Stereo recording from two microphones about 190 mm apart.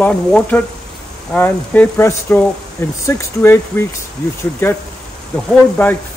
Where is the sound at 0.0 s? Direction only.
10° left (ahead or behind).